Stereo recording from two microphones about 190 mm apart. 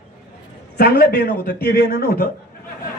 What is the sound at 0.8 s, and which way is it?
A man's voice, 55° left (ahead or behind).